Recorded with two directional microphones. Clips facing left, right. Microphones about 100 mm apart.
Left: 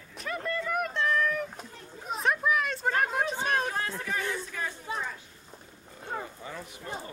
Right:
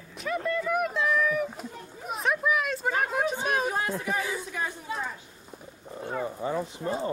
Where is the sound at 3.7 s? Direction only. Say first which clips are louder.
Right 4 dB; 20° right (ahead or behind).